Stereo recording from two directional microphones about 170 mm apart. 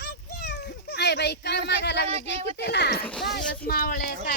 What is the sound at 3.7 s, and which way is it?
Speech, 55° left (ahead or behind).